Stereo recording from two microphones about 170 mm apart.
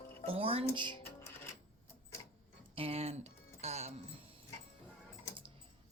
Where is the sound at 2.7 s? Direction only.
35° right (ahead or behind).